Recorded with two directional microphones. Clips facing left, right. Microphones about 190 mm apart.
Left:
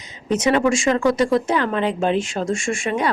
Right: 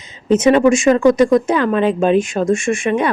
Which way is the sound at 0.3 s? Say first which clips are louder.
Right 6 dB; 20° right (ahead or behind).